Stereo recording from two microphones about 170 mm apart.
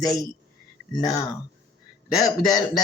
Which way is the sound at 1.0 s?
20° left (ahead or behind).